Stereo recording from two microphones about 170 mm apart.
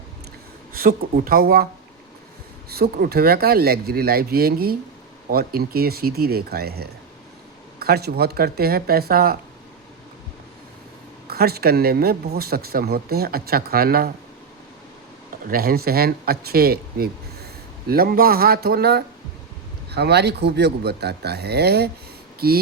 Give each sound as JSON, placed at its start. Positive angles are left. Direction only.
{"t": 0.7, "sound": "speech", "side_deg": -55}
{"t": 2.6, "sound": "speech", "side_deg": -65}
{"t": 11.3, "sound": "speech", "side_deg": -65}
{"t": 15.4, "sound": "speech", "side_deg": -60}